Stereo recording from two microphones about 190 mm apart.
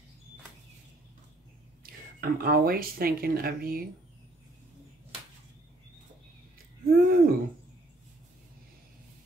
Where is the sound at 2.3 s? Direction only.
50° right (ahead or behind).